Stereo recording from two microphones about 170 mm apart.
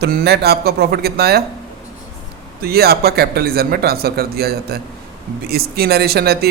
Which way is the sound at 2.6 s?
65° right (ahead or behind).